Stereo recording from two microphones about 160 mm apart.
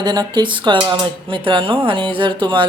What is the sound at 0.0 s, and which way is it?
A woman's voice, 25° right (ahead or behind).